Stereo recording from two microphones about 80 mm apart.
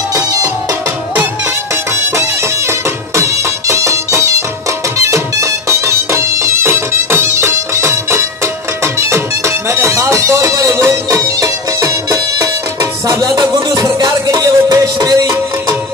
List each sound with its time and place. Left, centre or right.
1.4 s music: right
13.4 s music: right